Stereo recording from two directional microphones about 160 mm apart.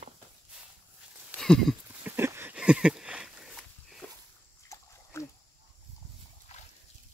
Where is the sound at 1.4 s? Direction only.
5° left (ahead or behind).